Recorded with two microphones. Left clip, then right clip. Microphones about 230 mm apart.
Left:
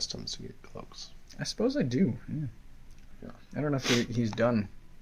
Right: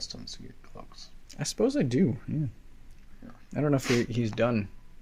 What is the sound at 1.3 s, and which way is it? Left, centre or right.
Speech, right.